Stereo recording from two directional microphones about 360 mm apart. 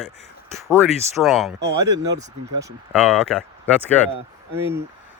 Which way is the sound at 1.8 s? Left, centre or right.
Right.